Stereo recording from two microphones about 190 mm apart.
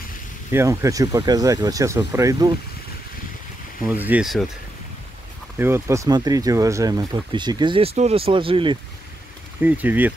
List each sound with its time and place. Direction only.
0.5 s speech: 15° right (ahead or behind)
3.8 s speech: 10° right (ahead or behind)
5.6 s speech: 15° right (ahead or behind)
9.6 s speech: 10° right (ahead or behind)